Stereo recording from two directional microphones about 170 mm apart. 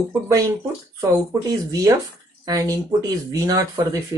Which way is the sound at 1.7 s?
20° right (ahead or behind).